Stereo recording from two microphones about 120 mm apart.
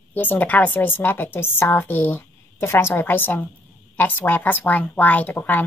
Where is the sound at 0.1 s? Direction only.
15° left (ahead or behind).